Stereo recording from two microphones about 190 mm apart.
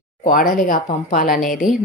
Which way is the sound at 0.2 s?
45° left (ahead or behind).